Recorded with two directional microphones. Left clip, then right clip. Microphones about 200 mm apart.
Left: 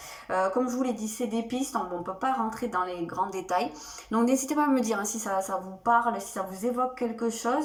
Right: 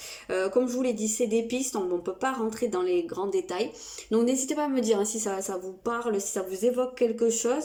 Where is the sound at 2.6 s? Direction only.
50° right (ahead or behind).